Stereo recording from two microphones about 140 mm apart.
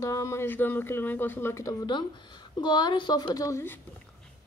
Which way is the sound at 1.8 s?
35° left (ahead or behind).